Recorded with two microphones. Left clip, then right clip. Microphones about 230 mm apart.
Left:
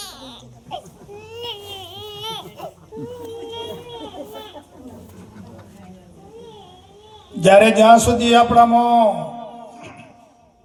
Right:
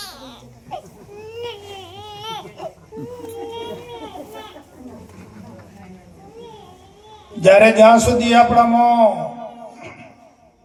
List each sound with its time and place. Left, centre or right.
0.0 s laughter: left
1.3 s baby cry: left
2.9 s a sound: left
7.4 s a man's voice: left